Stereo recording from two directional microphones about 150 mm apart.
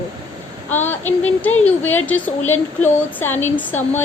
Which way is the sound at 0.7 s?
15° left (ahead or behind).